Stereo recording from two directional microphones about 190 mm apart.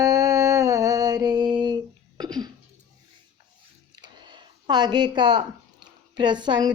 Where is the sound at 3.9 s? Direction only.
25° right (ahead or behind).